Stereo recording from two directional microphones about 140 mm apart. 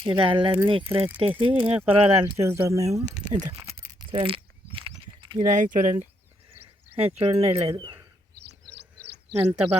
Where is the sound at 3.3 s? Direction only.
55° right (ahead or behind).